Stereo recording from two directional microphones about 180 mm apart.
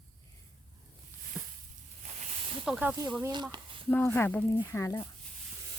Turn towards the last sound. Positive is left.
turn(degrees=15)  # may be behind; listen again after turning